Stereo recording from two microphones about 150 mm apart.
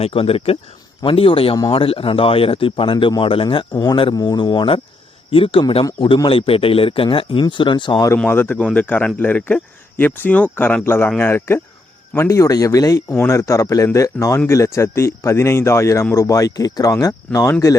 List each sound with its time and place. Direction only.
0.0 s speech: 40° left (ahead or behind)
3.7 s speech: 25° left (ahead or behind)
8.3 s speech: 15° left (ahead or behind)